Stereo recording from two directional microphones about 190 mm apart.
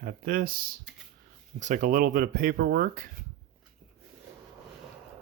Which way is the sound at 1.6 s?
45° right (ahead or behind).